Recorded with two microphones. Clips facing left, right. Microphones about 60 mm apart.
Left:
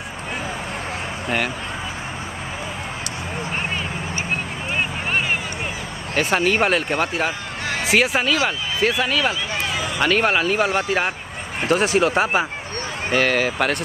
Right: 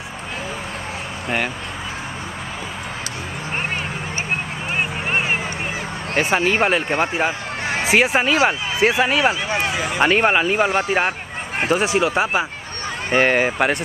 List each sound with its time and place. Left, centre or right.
4.7 s a sound: right
6.1 s speech: centre; by 10.0 s right
10.0 s speech: right